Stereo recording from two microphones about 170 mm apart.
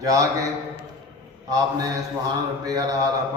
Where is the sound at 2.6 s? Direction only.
20° right (ahead or behind).